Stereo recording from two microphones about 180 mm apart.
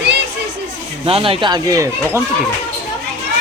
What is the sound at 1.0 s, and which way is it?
Speech, 30° right (ahead or behind).